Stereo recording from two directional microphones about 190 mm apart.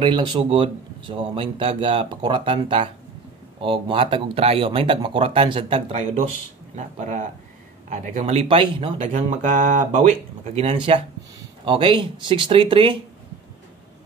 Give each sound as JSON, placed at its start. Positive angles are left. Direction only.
{"t": 0.0, "sound": "speech", "side_deg": -25}
{"t": 9.0, "sound": "speech", "side_deg": -40}